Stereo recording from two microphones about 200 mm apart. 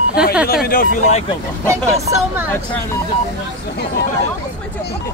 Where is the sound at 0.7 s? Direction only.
40° left (ahead or behind).